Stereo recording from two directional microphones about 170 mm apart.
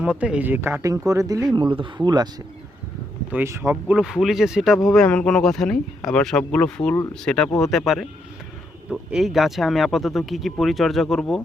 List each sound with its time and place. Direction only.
0.0 s speech: 5° right (ahead or behind); by 2.3 s 25° right (ahead or behind)
3.3 s speech: 15° right (ahead or behind)
3.9 s speech: 5° right (ahead or behind)